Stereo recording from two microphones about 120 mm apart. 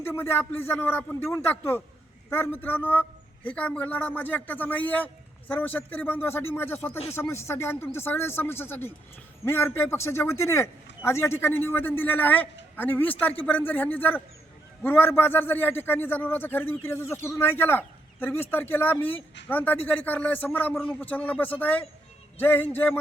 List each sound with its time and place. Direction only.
0.0 s a man's voice: 20° left (ahead or behind)